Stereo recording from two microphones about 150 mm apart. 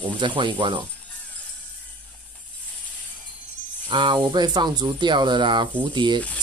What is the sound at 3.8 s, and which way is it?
Speech, 30° right (ahead or behind).